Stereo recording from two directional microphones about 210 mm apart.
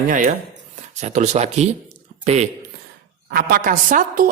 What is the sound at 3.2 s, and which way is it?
Mantra, 50° right (ahead or behind).